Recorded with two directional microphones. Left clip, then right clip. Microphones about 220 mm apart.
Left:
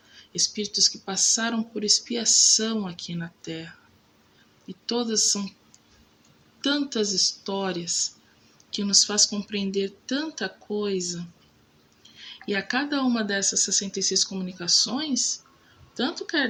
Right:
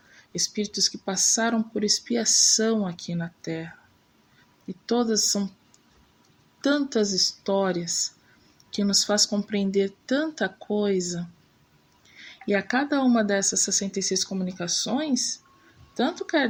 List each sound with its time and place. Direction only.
0.2 s speech: 25° right (ahead or behind)
4.9 s speech: 25° right (ahead or behind)
6.6 s speech: 25° right (ahead or behind)
12.5 s speech: 25° right (ahead or behind)